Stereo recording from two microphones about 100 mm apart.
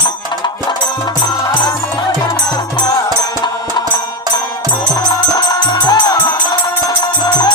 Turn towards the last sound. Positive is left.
turn(degrees=40)  # may be behind; listen again after turning